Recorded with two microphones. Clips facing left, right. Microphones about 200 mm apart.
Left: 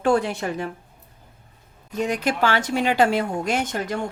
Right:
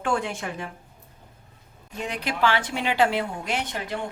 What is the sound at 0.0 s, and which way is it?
Speech, 35° left (ahead or behind).